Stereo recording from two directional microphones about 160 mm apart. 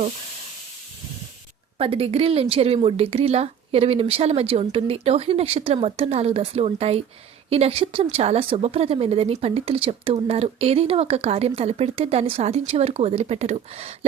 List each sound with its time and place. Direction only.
1.8 s speech: 35° right (ahead or behind)